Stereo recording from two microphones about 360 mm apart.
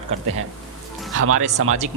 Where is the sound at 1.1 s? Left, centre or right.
Right.